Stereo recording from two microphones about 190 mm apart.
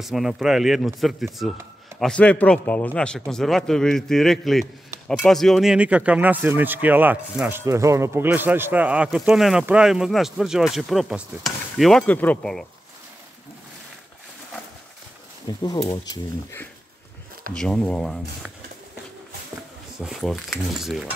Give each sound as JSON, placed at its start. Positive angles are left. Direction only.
{"t": 0.0, "sound": "a man's voice", "side_deg": 0}
{"t": 15.5, "sound": "speech", "side_deg": 25}
{"t": 17.6, "sound": "a man's voice", "side_deg": 5}
{"t": 20.0, "sound": "a man's voice", "side_deg": 0}